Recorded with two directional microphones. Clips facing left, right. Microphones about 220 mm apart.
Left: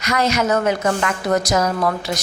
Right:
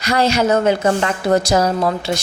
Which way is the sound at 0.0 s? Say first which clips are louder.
Right 3 dB; 30° right (ahead or behind).